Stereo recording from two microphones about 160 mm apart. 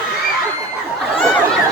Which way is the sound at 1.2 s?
5° left (ahead or behind).